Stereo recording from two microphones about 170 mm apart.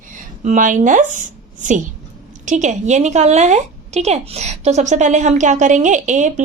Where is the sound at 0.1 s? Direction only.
50° right (ahead or behind).